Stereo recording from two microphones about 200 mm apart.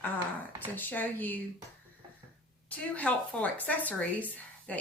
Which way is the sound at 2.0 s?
20° right (ahead or behind).